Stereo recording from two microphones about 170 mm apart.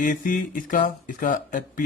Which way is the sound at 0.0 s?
50° left (ahead or behind).